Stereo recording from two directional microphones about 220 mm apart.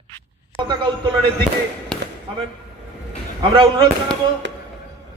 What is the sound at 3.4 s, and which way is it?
Speech, 20° right (ahead or behind).